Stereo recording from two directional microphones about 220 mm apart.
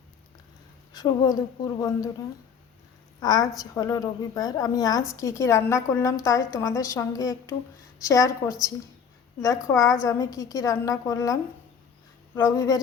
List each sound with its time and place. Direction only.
0.9 s a woman's voice: 15° left (ahead or behind)
3.2 s a woman's voice: 15° left (ahead or behind)
9.6 s a woman's voice: 15° left (ahead or behind)